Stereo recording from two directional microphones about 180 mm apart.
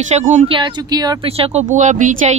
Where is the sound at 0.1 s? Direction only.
40° right (ahead or behind).